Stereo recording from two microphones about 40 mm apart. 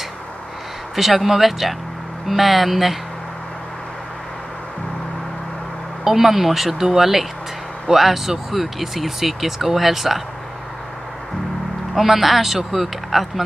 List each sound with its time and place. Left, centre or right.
0.9 s speech: centre
6.0 s speech: centre
11.9 s speech: centre